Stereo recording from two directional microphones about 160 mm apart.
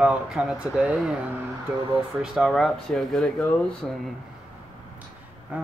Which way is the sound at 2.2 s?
Centre (ahead or behind).